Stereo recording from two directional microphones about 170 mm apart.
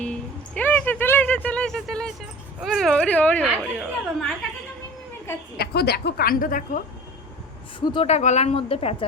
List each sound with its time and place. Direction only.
0.0 s a sound: 10° left (ahead or behind)
2.6 s speech: centre (ahead or behind)
5.5 s a woman's voice: 70° left (ahead or behind); by 6.8 s 50° left (ahead or behind)
7.8 s speech: 35° left (ahead or behind)